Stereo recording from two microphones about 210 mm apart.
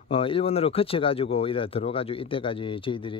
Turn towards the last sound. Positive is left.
turn(degrees=25)  # may be behind; listen again after turning